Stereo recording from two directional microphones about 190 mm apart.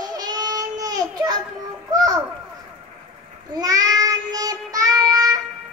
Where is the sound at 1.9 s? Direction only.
20° right (ahead or behind).